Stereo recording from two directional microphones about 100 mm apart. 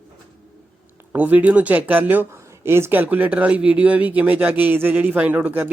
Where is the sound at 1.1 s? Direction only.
15° right (ahead or behind).